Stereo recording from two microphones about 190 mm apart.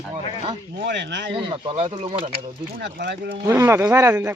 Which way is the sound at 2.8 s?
65° right (ahead or behind).